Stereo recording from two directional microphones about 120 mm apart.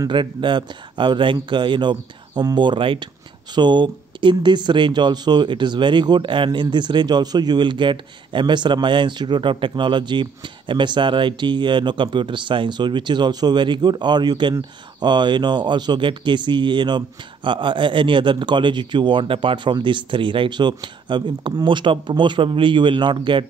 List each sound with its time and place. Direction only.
0.1 s speech: 40° right (ahead or behind)